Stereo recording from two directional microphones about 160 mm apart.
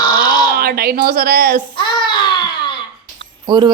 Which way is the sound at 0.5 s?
75° right (ahead or behind).